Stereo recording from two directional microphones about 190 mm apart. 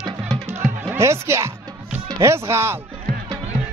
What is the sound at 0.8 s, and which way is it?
Speech, 15° right (ahead or behind).